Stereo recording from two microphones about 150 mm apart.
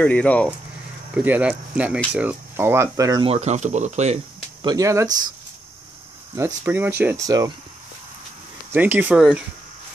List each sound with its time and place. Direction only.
0.0 s speech: 10° left (ahead or behind)
1.1 s speech: 10° right (ahead or behind)
3.3 s speech: 50° right (ahead or behind)
4.6 s speech: 20° right (ahead or behind)
6.3 s speech: 15° right (ahead or behind)
7.2 s speech: 25° right (ahead or behind)
8.7 s speech: 10° right (ahead or behind)